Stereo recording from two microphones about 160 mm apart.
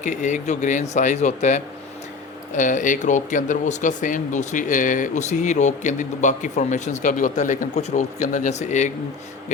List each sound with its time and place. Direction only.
0.0 s speech: 50° left (ahead or behind)